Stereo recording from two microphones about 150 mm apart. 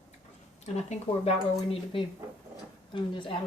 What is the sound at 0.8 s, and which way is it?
A woman's voice, 45° left (ahead or behind).